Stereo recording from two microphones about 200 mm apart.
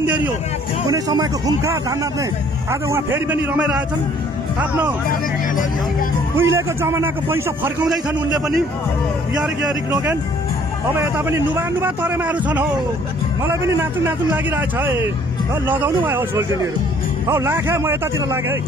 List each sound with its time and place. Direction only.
0.0 s a sound: 10° right (ahead or behind)
0.8 s a man's voice: 20° right (ahead or behind)
6.3 s a man's voice: 10° right (ahead or behind)
9.7 s a man's voice: 15° right (ahead or behind)
14.0 s a man's voice: 10° right (ahead or behind)